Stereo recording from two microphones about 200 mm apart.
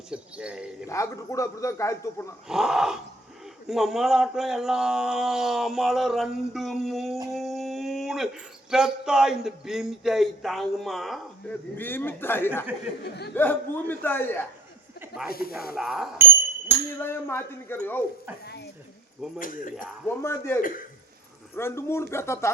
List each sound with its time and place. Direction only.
0.1 s speech: 5° right (ahead or behind)
0.9 s a man's voice: 15° left (ahead or behind)
2.5 s a man's voice: centre (ahead or behind)
15.0 s snake: 5° right (ahead or behind)
15.3 s speech: 50° left (ahead or behind)
15.5 s speech: 5° right (ahead or behind)
17.0 s a man's voice: 10° left (ahead or behind)
18.4 s speech: 55° left (ahead or behind)
19.4 s speech: 45° left (ahead or behind)
20.1 s a man's voice: 15° left (ahead or behind)
20.6 s speech: 45° left (ahead or behind)
21.5 s a man's voice: 10° left (ahead or behind)